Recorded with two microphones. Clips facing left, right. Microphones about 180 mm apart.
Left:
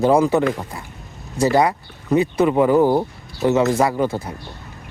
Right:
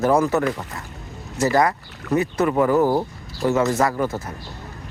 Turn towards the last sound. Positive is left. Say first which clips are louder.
# left 2 dB
turn(degrees=15)  # may be behind; listen again after turning